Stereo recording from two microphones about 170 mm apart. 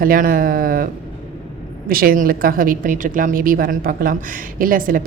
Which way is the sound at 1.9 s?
60° right (ahead or behind).